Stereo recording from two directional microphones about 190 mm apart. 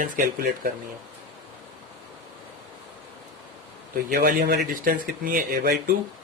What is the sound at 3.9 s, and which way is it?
A man's voice, 55° right (ahead or behind).